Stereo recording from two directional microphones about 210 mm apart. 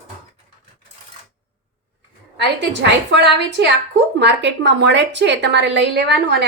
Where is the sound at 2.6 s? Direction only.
55° right (ahead or behind).